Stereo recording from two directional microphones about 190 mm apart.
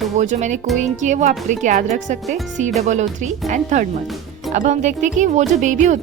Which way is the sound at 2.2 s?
Centre (ahead or behind).